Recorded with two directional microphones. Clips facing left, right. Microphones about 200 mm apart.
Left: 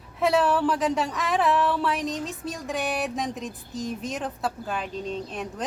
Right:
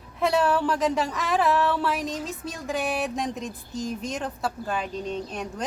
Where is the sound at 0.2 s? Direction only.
Centre (ahead or behind).